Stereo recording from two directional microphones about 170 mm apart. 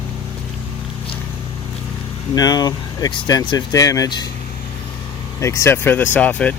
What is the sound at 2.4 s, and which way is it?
Speech, 20° left (ahead or behind).